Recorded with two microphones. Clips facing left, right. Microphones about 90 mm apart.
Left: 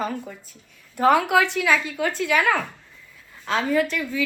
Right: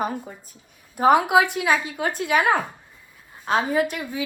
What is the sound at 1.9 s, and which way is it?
Speech, 45° right (ahead or behind).